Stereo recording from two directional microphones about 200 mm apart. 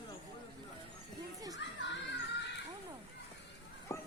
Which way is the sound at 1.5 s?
60° left (ahead or behind).